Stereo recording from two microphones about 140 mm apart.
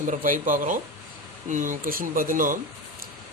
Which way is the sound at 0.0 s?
70° right (ahead or behind).